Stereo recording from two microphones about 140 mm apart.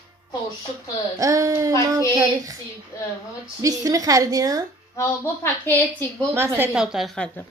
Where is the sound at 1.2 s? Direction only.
25° right (ahead or behind).